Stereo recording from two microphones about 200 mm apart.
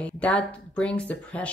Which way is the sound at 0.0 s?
5° left (ahead or behind).